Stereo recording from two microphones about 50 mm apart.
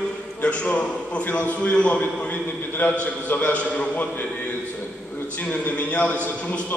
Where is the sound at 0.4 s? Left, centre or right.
Left.